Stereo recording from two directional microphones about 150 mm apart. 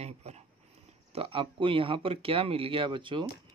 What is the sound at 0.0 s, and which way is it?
Dog, 45° right (ahead or behind).